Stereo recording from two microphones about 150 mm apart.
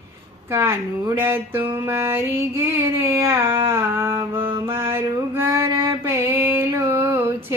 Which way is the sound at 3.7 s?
15° right (ahead or behind).